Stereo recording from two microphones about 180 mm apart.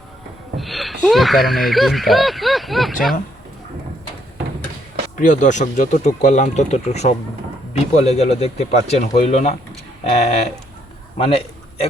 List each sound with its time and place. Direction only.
0.5 s speech: centre (ahead or behind)
5.1 s speech: 45° left (ahead or behind)